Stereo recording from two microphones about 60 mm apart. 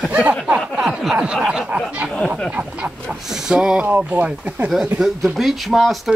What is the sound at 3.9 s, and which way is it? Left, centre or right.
Speech, right.